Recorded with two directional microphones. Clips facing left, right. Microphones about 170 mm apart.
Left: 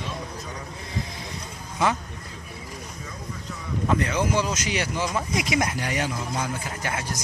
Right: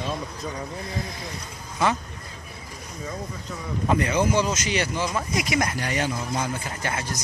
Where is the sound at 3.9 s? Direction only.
5° right (ahead or behind).